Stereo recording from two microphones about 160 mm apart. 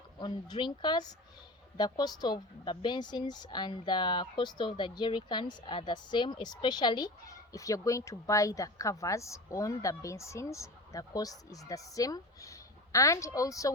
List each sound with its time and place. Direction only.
0.2 s speech: 30° left (ahead or behind)